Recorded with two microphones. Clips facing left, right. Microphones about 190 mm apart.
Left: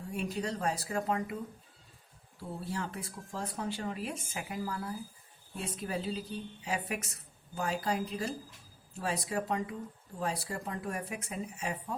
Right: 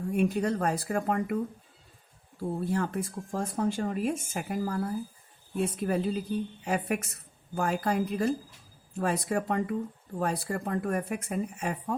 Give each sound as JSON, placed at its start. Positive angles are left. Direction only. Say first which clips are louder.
{"t": 0.1, "sound": "speech", "louder": "right 8 dB", "side_deg": -55}
{"t": 2.4, "sound": "speech", "louder": "right 8 dB", "side_deg": -50}